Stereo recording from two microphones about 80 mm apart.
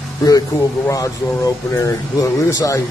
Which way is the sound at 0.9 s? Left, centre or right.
Left.